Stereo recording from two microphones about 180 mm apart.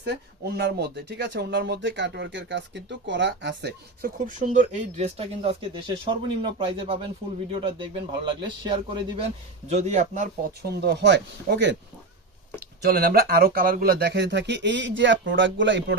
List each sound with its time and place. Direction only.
0.0 s speech: 65° right (ahead or behind)
4.3 s speech: 45° right (ahead or behind); by 9.2 s 25° right (ahead or behind)
9.6 s speech: 40° right (ahead or behind)
10.6 s speech: 70° right (ahead or behind)
12.8 s speech: 60° right (ahead or behind); by 16.0 s 85° right